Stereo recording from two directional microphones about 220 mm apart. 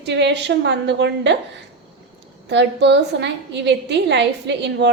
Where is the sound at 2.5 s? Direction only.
50° right (ahead or behind).